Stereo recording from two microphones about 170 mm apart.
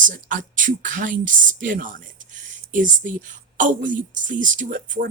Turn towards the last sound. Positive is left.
turn(degrees=-55)  # may be behind; listen again after turning